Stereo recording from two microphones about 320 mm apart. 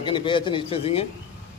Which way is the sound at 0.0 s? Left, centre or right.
Centre.